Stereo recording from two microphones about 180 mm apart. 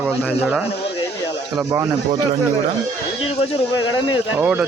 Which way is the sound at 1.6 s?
15° right (ahead or behind).